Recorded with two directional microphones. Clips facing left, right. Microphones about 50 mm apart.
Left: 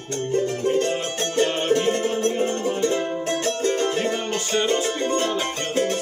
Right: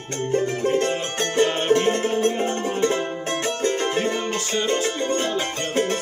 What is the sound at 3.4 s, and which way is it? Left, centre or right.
Music, right.